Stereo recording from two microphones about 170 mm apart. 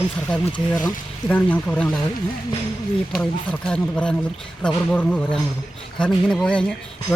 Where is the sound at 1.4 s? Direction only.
10° left (ahead or behind).